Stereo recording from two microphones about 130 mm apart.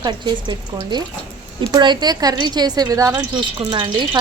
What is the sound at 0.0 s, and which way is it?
A woman's voice, 35° right (ahead or behind).